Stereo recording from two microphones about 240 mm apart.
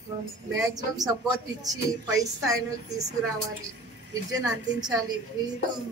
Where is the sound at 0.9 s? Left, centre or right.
Centre.